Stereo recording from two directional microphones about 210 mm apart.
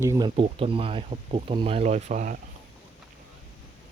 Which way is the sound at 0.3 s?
25° right (ahead or behind).